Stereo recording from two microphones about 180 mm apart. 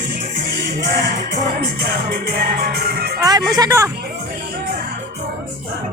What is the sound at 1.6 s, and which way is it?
Music, 60° right (ahead or behind).